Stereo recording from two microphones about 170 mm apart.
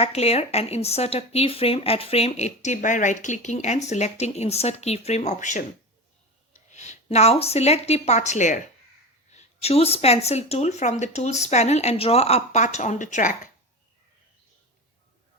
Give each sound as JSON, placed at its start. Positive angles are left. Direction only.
{"t": 0.0, "sound": "speech", "side_deg": 40}
{"t": 6.7, "sound": "speech", "side_deg": 45}